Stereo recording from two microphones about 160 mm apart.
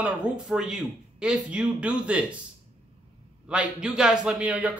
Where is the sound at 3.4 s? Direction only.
5° right (ahead or behind).